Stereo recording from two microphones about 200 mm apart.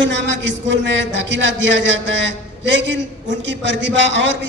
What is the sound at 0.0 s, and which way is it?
A man's voice, 65° right (ahead or behind).